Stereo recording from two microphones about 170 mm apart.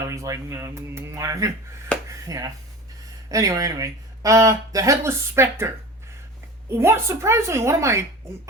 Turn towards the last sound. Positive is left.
turn(degrees=-15)  # may be behind; listen again after turning